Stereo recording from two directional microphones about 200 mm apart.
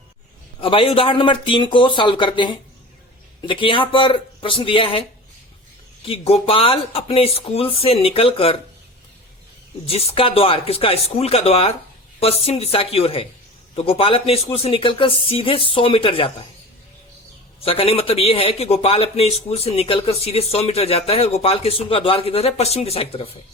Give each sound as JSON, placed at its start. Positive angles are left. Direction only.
{"t": 0.6, "sound": "a man's voice", "side_deg": 25}
{"t": 6.1, "sound": "a man's voice", "side_deg": 30}
{"t": 9.8, "sound": "a man's voice", "side_deg": 30}
{"t": 17.6, "sound": "a man's voice", "side_deg": 30}